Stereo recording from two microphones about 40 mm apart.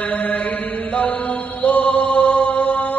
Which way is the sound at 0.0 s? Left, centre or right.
Left.